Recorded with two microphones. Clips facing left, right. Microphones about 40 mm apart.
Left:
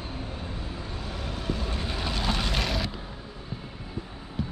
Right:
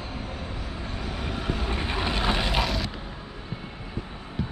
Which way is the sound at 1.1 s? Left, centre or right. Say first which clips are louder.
Right 2 dB; right.